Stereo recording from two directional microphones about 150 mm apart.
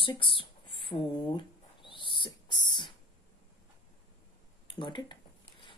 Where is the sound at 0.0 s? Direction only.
35° left (ahead or behind).